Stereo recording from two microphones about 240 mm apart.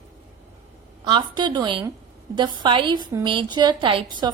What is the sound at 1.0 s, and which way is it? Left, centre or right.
A woman's voice, centre.